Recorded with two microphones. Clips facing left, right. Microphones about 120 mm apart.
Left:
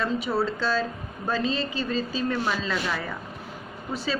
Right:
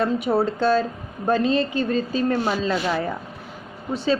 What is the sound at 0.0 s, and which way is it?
A woman's voice, 50° right (ahead or behind).